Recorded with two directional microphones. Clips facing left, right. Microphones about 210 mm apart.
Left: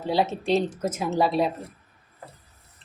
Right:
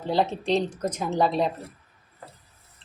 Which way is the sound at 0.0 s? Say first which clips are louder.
Even; 5° left (ahead or behind).